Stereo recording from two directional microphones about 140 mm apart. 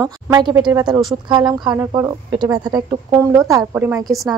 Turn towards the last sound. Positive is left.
turn(degrees=-20)  # may be behind; listen again after turning